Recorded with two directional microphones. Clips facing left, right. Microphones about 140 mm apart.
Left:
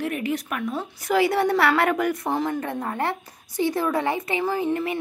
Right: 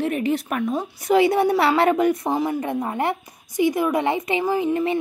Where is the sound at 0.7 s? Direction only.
20° right (ahead or behind).